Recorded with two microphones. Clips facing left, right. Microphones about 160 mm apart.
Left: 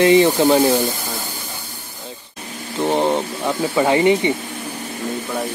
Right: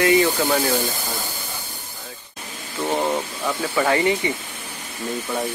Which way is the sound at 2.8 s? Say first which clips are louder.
Left 4 dB; 25° left (ahead or behind).